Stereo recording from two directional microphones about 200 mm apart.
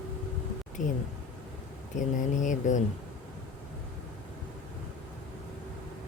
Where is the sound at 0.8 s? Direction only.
40° left (ahead or behind).